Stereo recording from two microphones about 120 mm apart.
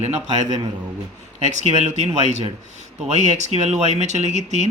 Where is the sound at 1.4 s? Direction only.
75° right (ahead or behind).